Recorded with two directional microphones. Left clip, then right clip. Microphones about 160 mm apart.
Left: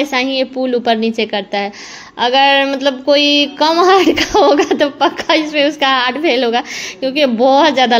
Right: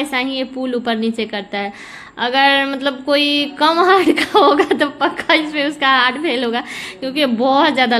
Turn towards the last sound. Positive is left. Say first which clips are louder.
# left 4 dB
turn(degrees=15)  # may be behind; listen again after turning